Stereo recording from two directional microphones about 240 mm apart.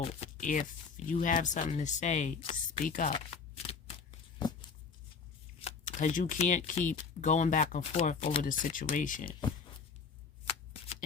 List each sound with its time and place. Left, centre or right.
0.0 s speech: left
5.5 s speech: left